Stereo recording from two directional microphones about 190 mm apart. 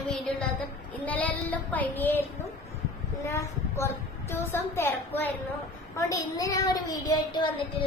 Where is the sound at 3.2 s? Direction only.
10° left (ahead or behind).